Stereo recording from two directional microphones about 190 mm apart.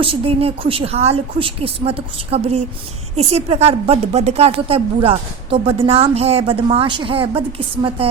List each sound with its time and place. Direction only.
0.0 s a woman's voice: 30° right (ahead or behind)